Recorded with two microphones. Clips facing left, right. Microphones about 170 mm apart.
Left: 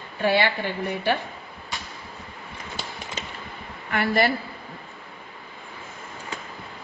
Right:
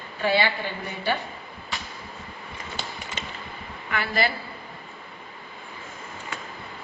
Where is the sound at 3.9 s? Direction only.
50° left (ahead or behind).